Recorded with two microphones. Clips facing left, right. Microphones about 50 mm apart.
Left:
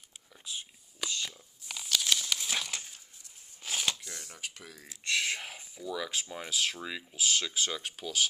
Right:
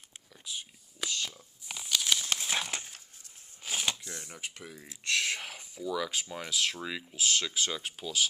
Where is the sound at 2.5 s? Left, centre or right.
Right.